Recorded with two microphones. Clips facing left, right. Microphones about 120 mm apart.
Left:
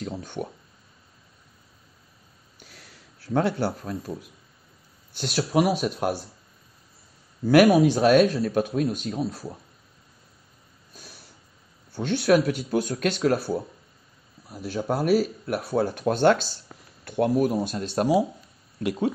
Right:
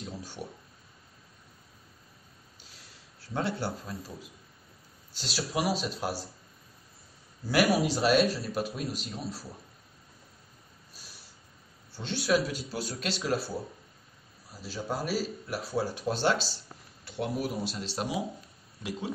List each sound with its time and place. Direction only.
0.0 s speech: 55° left (ahead or behind)
2.6 s sniff: 60° left (ahead or behind)
3.3 s speech: 55° left (ahead or behind)
5.1 s speech: 55° left (ahead or behind)
7.4 s speech: 55° left (ahead or behind)
11.9 s speech: 55° left (ahead or behind)
14.5 s speech: 55° left (ahead or behind)